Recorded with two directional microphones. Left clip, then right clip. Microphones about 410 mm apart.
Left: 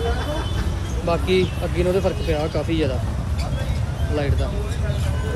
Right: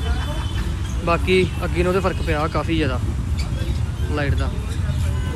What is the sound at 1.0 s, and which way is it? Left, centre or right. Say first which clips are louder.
Speech: right 2 dB; centre.